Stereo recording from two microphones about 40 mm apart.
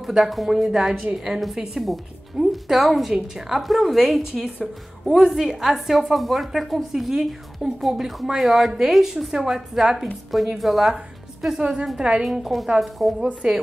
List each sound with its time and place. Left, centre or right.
0.0 s a woman's voice: centre
11.6 s a woman's voice: centre
12.3 s a woman's voice: centre
13.4 s speech: right